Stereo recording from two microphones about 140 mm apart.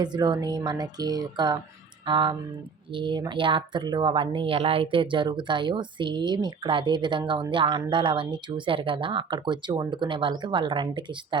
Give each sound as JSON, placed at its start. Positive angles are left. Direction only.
{"t": 0.0, "sound": "speech", "side_deg": -30}